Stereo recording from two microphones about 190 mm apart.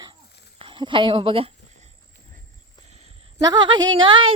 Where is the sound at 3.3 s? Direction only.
20° right (ahead or behind).